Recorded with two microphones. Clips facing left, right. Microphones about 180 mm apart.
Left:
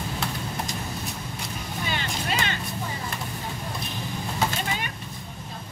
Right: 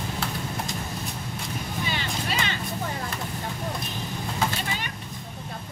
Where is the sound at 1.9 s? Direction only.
50° left (ahead or behind).